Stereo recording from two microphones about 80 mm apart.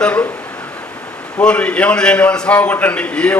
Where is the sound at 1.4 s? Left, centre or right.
Centre.